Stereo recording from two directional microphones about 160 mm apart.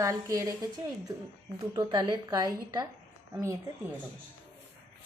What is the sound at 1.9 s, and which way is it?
A woman's voice, 30° right (ahead or behind).